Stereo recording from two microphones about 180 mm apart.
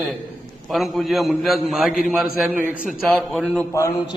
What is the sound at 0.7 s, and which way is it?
A man's voice, centre (ahead or behind).